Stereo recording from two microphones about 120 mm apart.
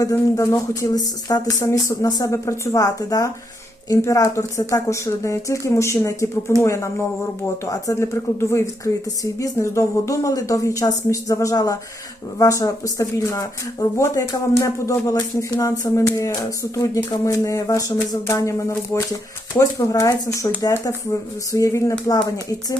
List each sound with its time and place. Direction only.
0.0 s speech: 25° left (ahead or behind)